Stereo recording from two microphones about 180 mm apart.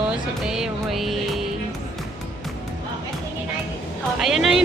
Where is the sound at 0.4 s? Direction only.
5° right (ahead or behind).